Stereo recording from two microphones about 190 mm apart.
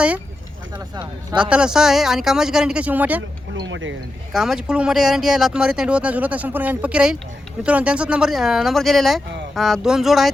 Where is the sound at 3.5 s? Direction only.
75° right (ahead or behind).